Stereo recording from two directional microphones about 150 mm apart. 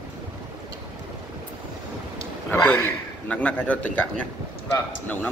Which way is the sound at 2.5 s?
15° left (ahead or behind).